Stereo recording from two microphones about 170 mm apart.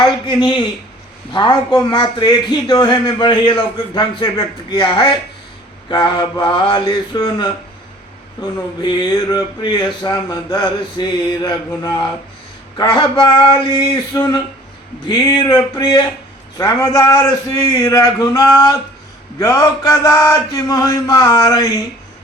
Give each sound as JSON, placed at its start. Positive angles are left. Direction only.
{"t": 0.3, "sound": "a man's voice", "side_deg": 30}